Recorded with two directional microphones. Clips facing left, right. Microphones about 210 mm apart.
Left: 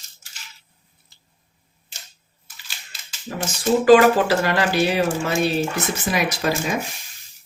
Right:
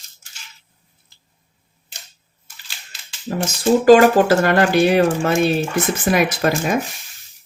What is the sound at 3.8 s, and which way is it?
Speech, 45° right (ahead or behind).